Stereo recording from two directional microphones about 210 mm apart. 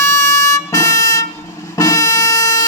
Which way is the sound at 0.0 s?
15° left (ahead or behind).